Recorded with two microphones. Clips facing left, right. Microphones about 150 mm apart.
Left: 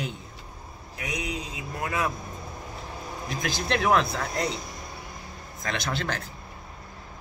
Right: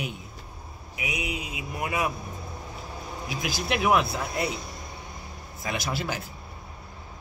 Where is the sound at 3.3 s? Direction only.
5° right (ahead or behind).